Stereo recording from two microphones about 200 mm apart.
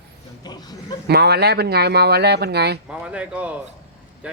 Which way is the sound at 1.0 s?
55° right (ahead or behind).